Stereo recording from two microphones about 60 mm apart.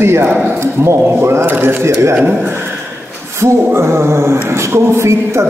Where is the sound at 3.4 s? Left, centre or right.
Right.